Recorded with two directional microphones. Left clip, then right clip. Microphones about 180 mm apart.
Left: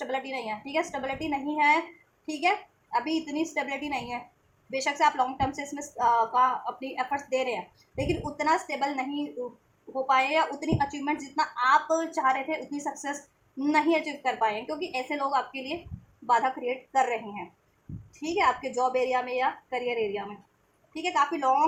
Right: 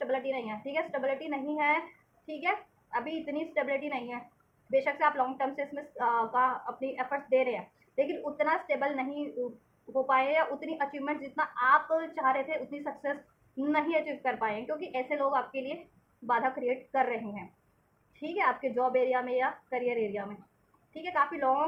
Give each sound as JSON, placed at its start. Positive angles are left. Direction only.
{"t": 0.0, "sound": "speech", "side_deg": 25}